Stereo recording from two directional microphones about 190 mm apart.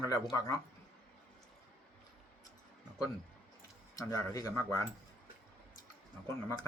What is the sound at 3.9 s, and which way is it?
Speech, 15° left (ahead or behind).